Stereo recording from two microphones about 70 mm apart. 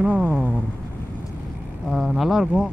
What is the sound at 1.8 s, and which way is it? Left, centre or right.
Speech, centre.